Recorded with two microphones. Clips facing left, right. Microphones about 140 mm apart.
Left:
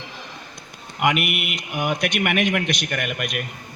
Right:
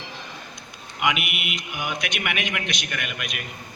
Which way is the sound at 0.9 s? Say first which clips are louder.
Left 4 dB; 50° left (ahead or behind).